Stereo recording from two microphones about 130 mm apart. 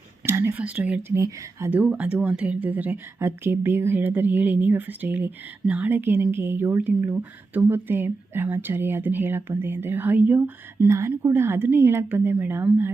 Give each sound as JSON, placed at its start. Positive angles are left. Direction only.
{"t": 0.3, "sound": "speech", "side_deg": -20}
{"t": 1.1, "sound": "speech", "side_deg": -20}